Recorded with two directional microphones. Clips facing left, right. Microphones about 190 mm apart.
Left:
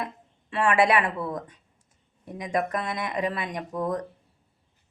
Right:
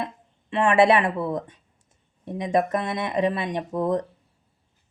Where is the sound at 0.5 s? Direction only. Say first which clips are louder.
Right 4 dB; 25° right (ahead or behind).